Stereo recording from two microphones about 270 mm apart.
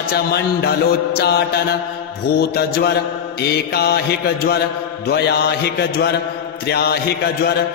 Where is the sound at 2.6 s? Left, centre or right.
Left.